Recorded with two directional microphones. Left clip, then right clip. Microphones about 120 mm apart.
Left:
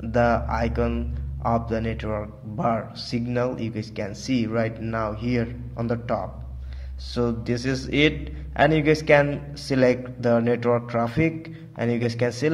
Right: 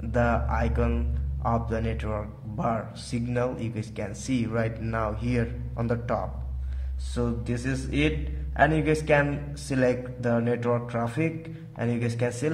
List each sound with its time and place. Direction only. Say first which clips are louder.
0.1 s a man's voice: left 4 dB; 20° left (ahead or behind); by 6.2 s 5° left (ahead or behind)
7.2 s a man's voice: left 5 dB; 25° left (ahead or behind)